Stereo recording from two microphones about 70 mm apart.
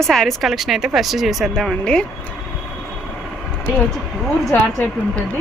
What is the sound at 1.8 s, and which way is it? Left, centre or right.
Speech, centre.